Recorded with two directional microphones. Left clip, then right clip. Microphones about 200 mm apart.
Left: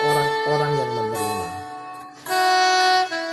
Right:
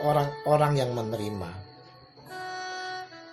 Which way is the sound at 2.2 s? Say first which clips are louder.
Left 19 dB; 40° left (ahead or behind).